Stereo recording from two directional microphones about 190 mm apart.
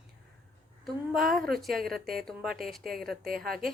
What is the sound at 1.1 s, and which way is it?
Speech, centre (ahead or behind).